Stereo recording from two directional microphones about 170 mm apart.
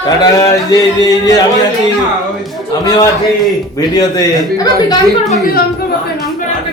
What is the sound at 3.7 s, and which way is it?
A man's voice, 20° left (ahead or behind).